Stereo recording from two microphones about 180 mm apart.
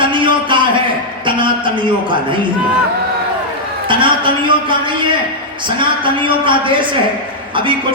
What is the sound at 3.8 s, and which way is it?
A man's voice, 30° right (ahead or behind).